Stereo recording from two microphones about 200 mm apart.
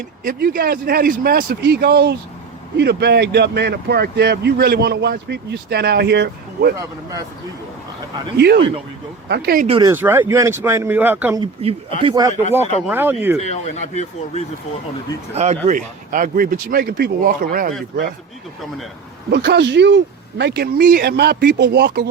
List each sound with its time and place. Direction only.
0.3 s speech: 45° right (ahead or behind)
6.7 s speech: 15° right (ahead or behind)
8.4 s speech: 55° right (ahead or behind)
9.8 s speech: 10° right (ahead or behind)
11.3 s speech: 25° right (ahead or behind)
12.9 s speech: 10° right (ahead or behind)
13.4 s speech: 35° left (ahead or behind)
15.4 s speech: 35° right (ahead or behind)
19.3 s speech: 60° right (ahead or behind)